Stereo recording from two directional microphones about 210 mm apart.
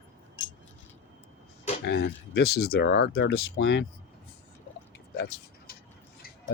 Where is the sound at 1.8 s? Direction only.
50° left (ahead or behind).